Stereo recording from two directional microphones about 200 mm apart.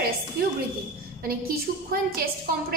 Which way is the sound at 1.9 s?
45° right (ahead or behind).